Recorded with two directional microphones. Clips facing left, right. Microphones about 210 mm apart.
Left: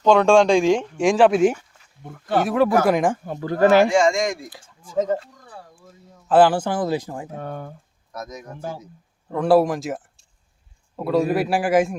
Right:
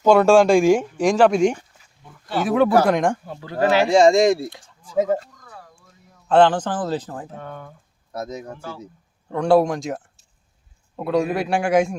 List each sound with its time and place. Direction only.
0.0 s speech: 5° right (ahead or behind)
2.0 s speech: 55° left (ahead or behind)
2.8 s a man's voice: 5° left (ahead or behind)
3.2 s speech: 50° left (ahead or behind)
3.8 s speech: 35° right (ahead or behind)
6.2 s speech: 5° left (ahead or behind)
7.3 s speech: 45° left (ahead or behind)
8.1 s speech: 30° right (ahead or behind)
9.3 s a man's voice: centre (ahead or behind)